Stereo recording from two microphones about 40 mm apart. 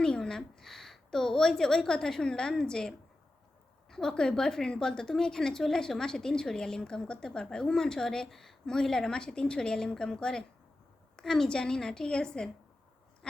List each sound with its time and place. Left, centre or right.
0.0 s a woman's voice: centre
3.8 s a sound: centre
4.1 s a woman's voice: centre